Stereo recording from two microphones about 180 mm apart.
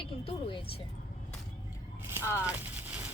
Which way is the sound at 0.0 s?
30° left (ahead or behind).